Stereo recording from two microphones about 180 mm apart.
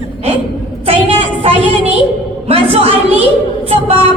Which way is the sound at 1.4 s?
35° right (ahead or behind).